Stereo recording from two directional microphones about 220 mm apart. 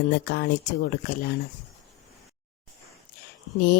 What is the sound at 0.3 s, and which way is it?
Speech, 50° left (ahead or behind).